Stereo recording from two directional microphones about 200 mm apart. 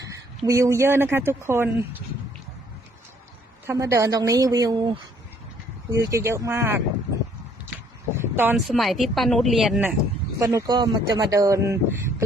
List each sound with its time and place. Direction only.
0.4 s speech: 15° right (ahead or behind)
3.7 s speech: 15° right (ahead or behind)
8.1 s speech: 10° right (ahead or behind)
10.4 s speech: 20° right (ahead or behind)